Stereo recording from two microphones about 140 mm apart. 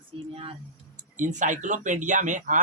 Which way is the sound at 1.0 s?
60° right (ahead or behind).